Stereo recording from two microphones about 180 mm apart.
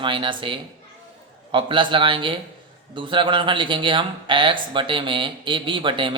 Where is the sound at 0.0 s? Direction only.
25° right (ahead or behind).